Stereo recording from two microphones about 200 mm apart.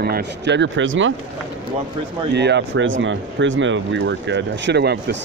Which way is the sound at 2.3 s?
60° right (ahead or behind).